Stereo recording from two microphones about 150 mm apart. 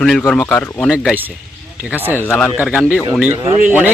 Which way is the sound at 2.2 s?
10° left (ahead or behind).